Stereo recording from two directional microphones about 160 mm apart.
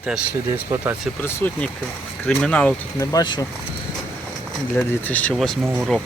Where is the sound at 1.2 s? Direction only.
15° left (ahead or behind).